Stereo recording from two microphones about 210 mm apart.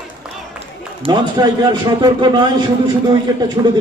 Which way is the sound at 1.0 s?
20° right (ahead or behind).